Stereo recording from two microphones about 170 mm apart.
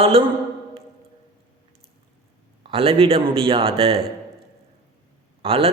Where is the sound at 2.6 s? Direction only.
35° right (ahead or behind).